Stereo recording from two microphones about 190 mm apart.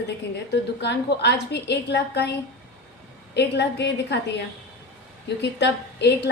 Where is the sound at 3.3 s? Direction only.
65° left (ahead or behind).